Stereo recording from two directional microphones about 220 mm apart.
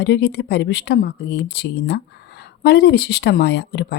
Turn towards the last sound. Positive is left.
turn(degrees=50)  # may be behind; listen again after turning